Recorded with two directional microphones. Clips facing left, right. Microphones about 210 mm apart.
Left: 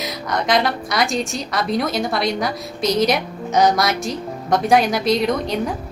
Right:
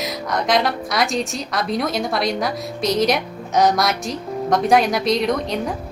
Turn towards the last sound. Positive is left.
turn(degrees=0)  # may be behind; listen again after turning